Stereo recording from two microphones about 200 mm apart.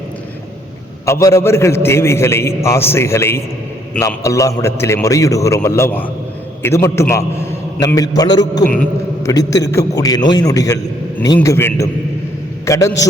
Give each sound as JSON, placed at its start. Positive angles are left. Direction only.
{"t": 1.0, "sound": "a man's voice", "side_deg": 15}
{"t": 8.6, "sound": "speech", "side_deg": 5}
{"t": 9.3, "sound": "a man's voice", "side_deg": 15}